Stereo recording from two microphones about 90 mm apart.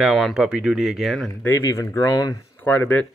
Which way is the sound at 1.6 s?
35° left (ahead or behind).